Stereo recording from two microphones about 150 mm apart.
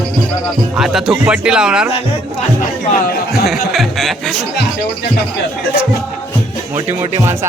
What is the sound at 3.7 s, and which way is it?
Speech, centre (ahead or behind).